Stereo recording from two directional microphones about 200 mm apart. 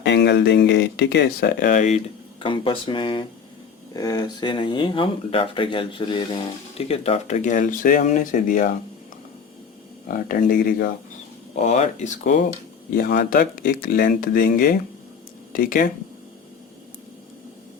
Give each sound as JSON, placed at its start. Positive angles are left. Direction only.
{"t": 0.0, "sound": "speech", "side_deg": 60}
{"t": 2.4, "sound": "speech", "side_deg": 25}
{"t": 10.1, "sound": "speech", "side_deg": 45}
{"t": 11.6, "sound": "speech", "side_deg": 35}
{"t": 13.0, "sound": "speech", "side_deg": 50}